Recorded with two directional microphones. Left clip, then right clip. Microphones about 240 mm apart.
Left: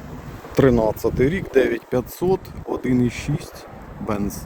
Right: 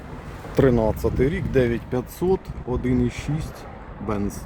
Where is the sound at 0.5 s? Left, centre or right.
Centre.